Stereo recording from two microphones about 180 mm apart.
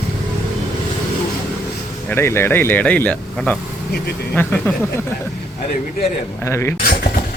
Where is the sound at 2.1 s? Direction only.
15° left (ahead or behind).